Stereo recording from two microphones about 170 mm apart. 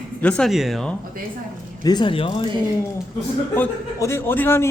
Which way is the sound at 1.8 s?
25° left (ahead or behind).